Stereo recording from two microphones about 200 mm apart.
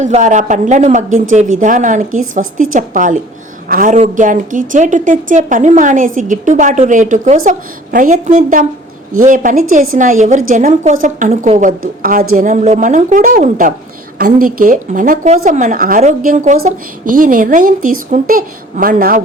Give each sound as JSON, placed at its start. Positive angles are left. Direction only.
{"t": 0.0, "sound": "a woman's voice", "side_deg": -40}